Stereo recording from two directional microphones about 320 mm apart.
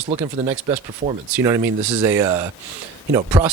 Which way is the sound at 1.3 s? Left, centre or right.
Centre.